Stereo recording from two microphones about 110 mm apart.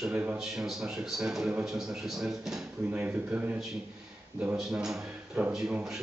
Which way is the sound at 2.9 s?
15° right (ahead or behind).